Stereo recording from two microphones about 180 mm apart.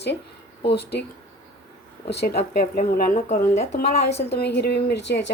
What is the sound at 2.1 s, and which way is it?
Speech, 65° left (ahead or behind).